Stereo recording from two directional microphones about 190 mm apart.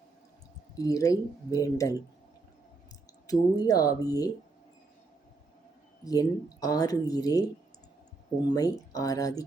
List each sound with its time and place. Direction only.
0.8 s speech: 15° left (ahead or behind)
3.2 s speech: 20° left (ahead or behind)
6.1 s speech: 20° left (ahead or behind)
8.4 s speech: 20° left (ahead or behind)